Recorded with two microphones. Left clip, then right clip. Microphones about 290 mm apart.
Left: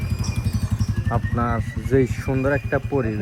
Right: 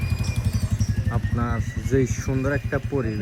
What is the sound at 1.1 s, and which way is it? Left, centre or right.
Speech, left.